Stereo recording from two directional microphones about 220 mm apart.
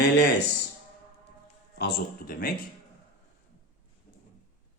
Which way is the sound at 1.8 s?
45° left (ahead or behind).